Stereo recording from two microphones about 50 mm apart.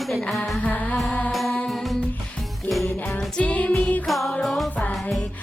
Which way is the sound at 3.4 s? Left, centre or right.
Left.